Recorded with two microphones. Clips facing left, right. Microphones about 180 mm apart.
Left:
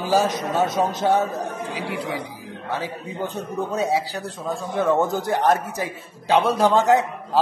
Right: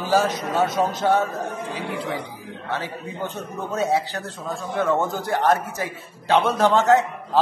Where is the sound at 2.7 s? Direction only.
15° left (ahead or behind).